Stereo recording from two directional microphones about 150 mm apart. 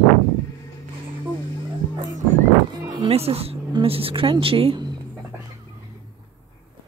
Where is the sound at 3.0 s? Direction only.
40° right (ahead or behind).